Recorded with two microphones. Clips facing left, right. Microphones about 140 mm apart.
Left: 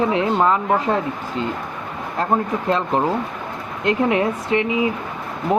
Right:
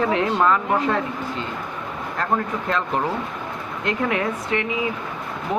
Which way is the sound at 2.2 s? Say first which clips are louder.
Left 4 dB; 25° left (ahead or behind).